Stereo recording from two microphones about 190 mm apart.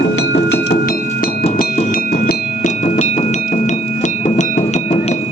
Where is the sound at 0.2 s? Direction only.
65° left (ahead or behind); by 5.1 s 35° left (ahead or behind).